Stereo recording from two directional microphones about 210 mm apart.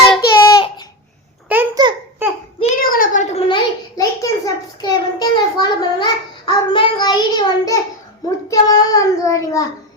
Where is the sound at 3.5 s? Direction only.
15° left (ahead or behind).